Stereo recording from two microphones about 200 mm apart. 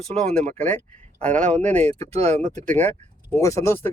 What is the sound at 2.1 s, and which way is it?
Speech, 35° right (ahead or behind).